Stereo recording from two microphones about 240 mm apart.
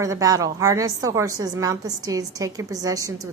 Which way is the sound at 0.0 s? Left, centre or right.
Centre.